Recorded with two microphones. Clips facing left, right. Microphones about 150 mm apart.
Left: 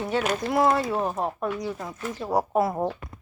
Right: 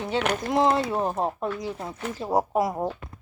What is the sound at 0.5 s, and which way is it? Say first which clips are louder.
Speech: even; 20° right (ahead or behind).